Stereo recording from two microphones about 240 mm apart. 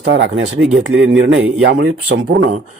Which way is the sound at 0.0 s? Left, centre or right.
Right.